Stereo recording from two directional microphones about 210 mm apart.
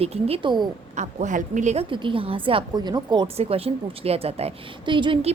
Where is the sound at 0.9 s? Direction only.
35° right (ahead or behind).